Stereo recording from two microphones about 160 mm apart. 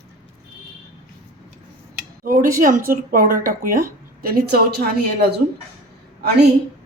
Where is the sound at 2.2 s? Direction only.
60° right (ahead or behind).